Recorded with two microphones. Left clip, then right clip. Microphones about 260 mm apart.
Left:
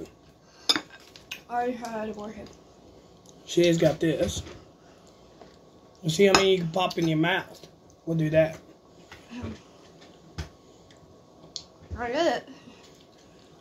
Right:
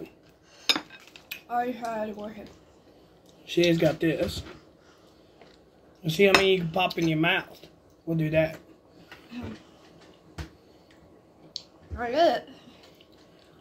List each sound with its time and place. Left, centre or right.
1.3 s a woman's voice: centre
3.4 s speech: centre
6.0 s speech: centre
11.5 s a sound: centre